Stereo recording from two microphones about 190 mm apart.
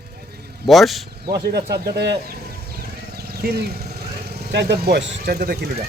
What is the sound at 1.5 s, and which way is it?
Speech, 60° right (ahead or behind).